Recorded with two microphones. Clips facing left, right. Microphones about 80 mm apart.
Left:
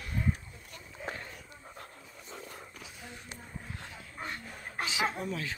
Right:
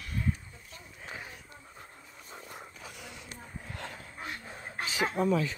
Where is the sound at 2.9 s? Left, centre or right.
Right.